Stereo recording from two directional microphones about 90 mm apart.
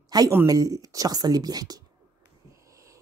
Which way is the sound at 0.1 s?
45° right (ahead or behind).